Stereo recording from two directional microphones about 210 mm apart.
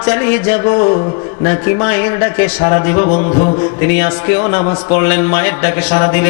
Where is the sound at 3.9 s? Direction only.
15° left (ahead or behind).